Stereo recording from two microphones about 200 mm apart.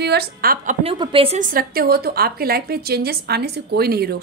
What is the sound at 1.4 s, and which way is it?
A woman's voice, 45° right (ahead or behind).